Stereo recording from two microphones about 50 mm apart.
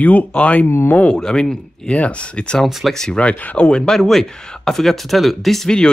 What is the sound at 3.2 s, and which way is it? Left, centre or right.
Speech, left.